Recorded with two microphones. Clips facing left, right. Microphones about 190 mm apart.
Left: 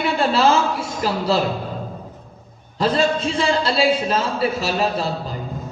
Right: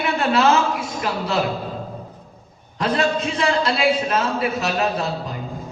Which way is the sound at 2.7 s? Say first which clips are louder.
Left 2 dB; 30° left (ahead or behind).